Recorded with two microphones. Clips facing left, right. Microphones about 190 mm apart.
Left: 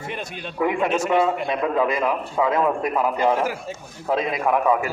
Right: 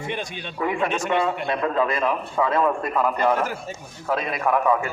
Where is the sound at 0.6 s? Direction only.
10° left (ahead or behind).